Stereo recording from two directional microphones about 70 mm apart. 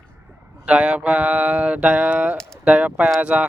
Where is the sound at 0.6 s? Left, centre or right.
Centre.